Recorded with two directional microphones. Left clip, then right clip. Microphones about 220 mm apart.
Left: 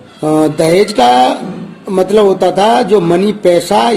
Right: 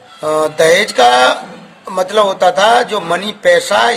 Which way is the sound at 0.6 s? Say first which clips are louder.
Right 2 dB; 30° right (ahead or behind).